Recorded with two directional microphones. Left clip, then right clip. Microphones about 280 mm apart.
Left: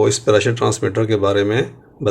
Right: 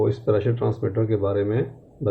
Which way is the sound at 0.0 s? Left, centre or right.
Left.